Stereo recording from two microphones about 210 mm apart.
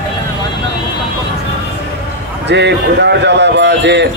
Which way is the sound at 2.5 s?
55° right (ahead or behind).